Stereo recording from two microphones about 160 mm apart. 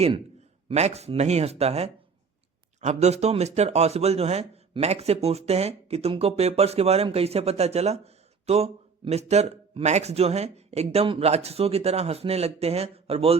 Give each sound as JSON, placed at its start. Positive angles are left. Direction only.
{"t": 0.7, "sound": "speech", "side_deg": -40}